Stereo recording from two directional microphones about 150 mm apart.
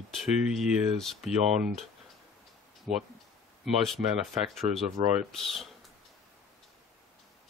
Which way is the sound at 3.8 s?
Centre (ahead or behind).